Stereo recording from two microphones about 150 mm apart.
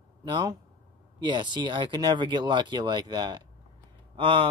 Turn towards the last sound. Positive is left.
turn(degrees=-35)  # may be behind; listen again after turning